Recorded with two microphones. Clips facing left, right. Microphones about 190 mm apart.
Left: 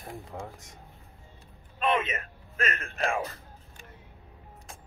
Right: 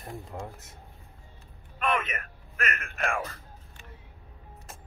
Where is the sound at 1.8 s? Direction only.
25° left (ahead or behind).